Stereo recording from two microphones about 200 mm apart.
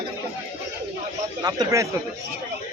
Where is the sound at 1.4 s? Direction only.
15° right (ahead or behind).